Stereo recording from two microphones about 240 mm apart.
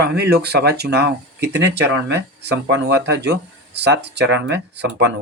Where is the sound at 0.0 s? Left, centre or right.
Right.